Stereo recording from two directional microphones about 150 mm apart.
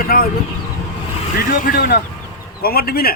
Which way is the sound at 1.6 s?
90° left.